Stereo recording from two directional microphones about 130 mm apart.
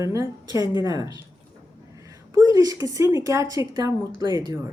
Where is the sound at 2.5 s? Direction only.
25° right (ahead or behind).